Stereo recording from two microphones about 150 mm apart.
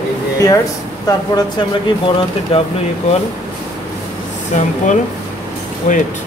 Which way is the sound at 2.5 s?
40° left (ahead or behind).